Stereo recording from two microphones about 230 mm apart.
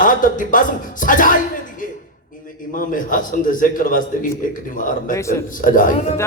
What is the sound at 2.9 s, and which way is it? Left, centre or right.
A man's voice, left.